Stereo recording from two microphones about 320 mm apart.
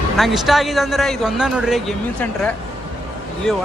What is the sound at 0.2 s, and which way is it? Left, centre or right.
A man's voice, centre.